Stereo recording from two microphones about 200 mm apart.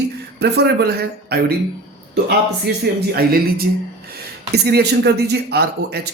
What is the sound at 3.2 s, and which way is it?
A woman's voice, 50° right (ahead or behind).